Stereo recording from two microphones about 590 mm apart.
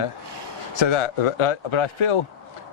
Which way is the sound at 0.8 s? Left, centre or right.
Left.